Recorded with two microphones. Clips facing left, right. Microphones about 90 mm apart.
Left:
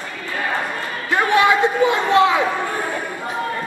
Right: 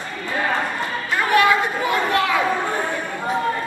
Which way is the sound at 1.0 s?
20° left (ahead or behind).